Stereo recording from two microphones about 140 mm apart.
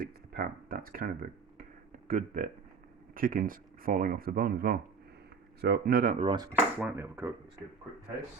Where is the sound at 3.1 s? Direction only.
80° right.